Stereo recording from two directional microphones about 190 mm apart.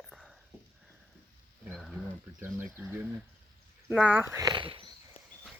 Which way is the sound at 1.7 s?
Centre (ahead or behind).